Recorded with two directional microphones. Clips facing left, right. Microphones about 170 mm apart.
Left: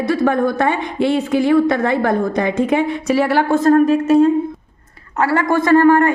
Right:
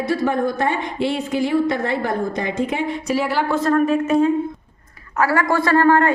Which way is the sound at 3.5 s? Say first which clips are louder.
Left 5 dB; 45° left (ahead or behind).